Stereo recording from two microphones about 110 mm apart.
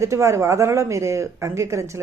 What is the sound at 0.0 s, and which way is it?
Speech, 25° right (ahead or behind).